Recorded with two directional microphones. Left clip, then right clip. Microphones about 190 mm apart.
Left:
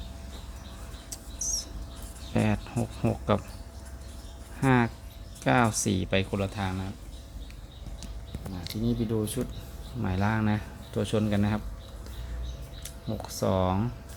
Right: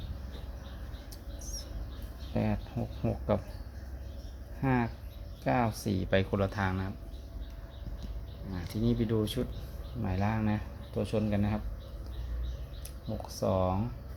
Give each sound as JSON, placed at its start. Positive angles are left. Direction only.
{"t": 1.4, "sound": "a sound", "side_deg": 15}
{"t": 2.3, "sound": "speech", "side_deg": 15}
{"t": 4.6, "sound": "speech", "side_deg": 15}
{"t": 8.8, "sound": "speech", "side_deg": 5}
{"t": 13.2, "sound": "speech", "side_deg": 25}